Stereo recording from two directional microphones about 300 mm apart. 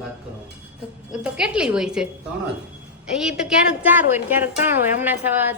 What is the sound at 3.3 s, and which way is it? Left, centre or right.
A woman's voice, centre.